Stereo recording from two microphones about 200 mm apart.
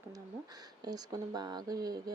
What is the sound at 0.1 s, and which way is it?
Speech, 20° right (ahead or behind).